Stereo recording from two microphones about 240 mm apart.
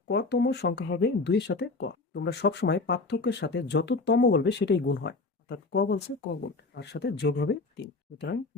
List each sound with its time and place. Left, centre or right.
0.1 s speech: left